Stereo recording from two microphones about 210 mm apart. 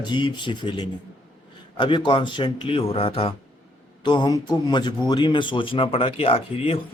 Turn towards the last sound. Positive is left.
turn(degrees=25)  # may be behind; listen again after turning